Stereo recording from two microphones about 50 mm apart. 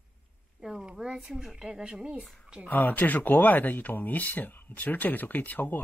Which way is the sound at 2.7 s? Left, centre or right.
Left.